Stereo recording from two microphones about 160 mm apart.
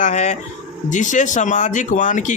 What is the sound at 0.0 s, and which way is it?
A man's voice, 45° left (ahead or behind).